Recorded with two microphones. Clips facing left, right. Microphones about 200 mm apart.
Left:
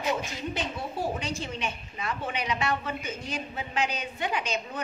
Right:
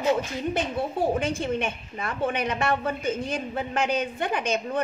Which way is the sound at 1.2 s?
55° right (ahead or behind).